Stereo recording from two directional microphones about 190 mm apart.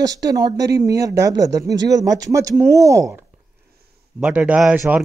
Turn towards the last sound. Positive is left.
turn(degrees=-10)  # may be behind; listen again after turning